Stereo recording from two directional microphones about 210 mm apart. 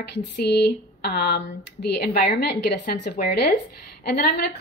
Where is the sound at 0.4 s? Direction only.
50° left (ahead or behind).